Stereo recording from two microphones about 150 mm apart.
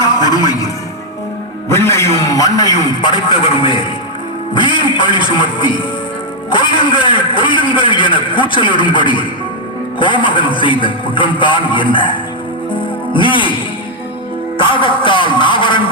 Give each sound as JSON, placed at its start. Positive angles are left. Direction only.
{"t": 0.0, "sound": "music", "side_deg": 25}
{"t": 1.7, "sound": "a man's voice", "side_deg": 15}
{"t": 12.7, "sound": "music", "side_deg": 35}
{"t": 14.6, "sound": "speech", "side_deg": 35}